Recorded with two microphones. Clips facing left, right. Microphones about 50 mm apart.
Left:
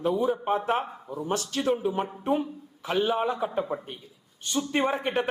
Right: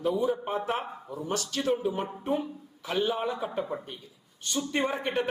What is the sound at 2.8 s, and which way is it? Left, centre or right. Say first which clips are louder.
Speech: left 2 dB; left.